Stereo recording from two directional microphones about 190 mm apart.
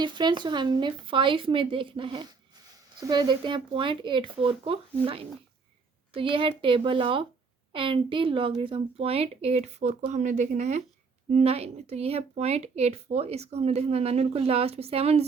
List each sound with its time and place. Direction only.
0.0 s speech: 25° right (ahead or behind)